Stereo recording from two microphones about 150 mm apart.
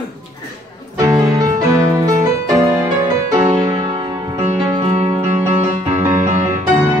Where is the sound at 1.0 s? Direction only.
20° right (ahead or behind).